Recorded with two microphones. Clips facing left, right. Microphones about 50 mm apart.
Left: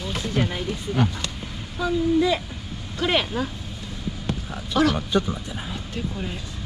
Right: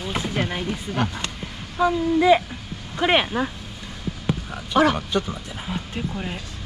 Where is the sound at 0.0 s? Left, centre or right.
Centre.